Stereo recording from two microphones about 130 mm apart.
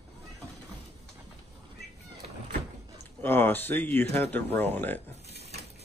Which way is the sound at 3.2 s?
15° left (ahead or behind).